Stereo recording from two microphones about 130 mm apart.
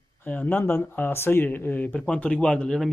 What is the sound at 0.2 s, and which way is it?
Speech, 15° left (ahead or behind).